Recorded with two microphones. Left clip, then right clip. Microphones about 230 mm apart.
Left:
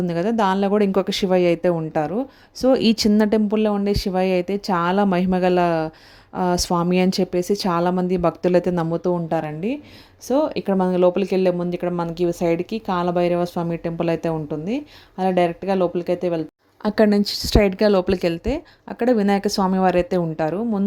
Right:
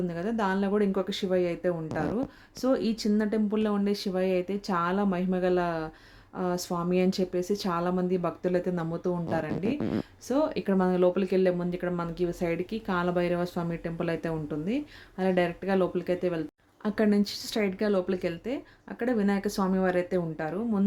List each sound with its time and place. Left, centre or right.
0.1 s speech: left